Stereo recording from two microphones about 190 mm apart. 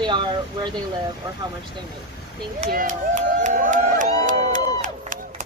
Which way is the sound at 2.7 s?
45° right (ahead or behind).